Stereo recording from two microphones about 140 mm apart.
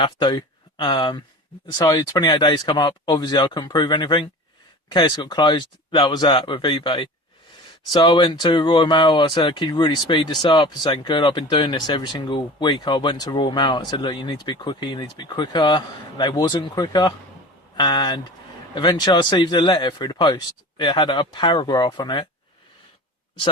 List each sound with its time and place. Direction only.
0.0 s speech: 35° left (ahead or behind)